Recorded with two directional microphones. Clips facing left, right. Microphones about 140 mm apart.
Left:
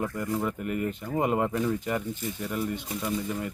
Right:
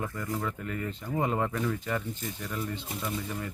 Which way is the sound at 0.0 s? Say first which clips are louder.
Left 4 dB; 15° left (ahead or behind).